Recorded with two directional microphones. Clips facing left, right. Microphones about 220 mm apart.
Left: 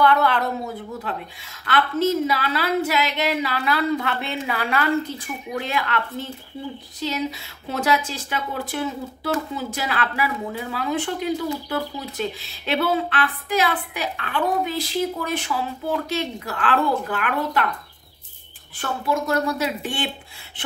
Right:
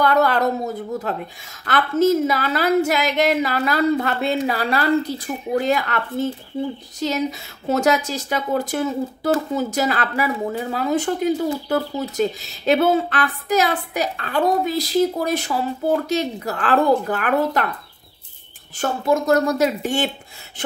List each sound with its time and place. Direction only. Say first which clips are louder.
0.0 s a woman's voice: right 2 dB; 40° right (ahead or behind)
18.8 s speech: right 5 dB; 45° right (ahead or behind)